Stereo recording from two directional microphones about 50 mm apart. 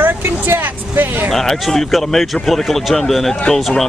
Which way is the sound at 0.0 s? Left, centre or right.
Right.